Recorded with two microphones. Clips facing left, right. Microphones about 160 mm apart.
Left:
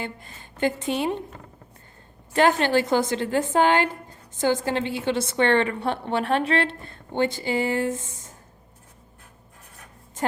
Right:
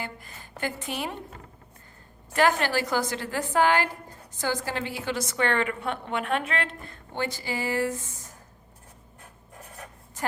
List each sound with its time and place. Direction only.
0.0 s speech: 25° left (ahead or behind)
2.3 s a woman's voice: 25° left (ahead or behind)
10.2 s a sound: 25° left (ahead or behind)